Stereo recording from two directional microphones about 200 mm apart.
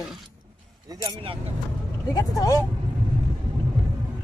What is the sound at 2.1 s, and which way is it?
Speech, 15° left (ahead or behind).